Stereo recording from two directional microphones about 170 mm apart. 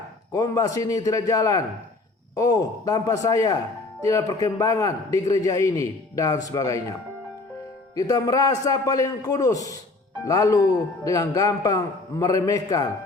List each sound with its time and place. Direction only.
0.3 s a man's voice: 20° left (ahead or behind)
7.9 s a man's voice: 20° left (ahead or behind)